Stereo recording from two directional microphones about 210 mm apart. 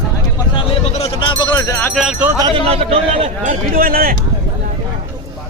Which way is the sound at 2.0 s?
5° right (ahead or behind).